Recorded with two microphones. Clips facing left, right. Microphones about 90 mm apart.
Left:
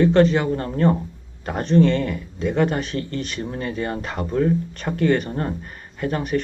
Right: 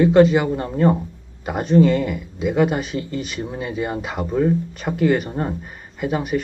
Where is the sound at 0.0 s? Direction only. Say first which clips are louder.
Right 2 dB; 5° right (ahead or behind).